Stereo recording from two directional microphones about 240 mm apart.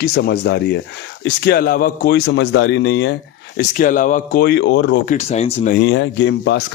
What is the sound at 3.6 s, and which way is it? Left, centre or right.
A man's voice, left.